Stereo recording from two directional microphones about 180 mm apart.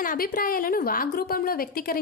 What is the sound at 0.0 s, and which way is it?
A woman's voice, 55° left (ahead or behind).